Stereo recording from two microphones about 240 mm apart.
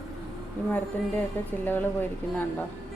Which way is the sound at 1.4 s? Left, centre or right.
Centre.